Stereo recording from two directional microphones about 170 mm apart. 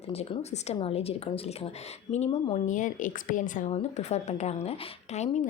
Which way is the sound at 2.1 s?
25° left (ahead or behind).